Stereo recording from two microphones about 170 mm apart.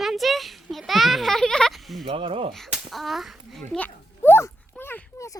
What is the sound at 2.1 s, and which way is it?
Speech, 35° right (ahead or behind).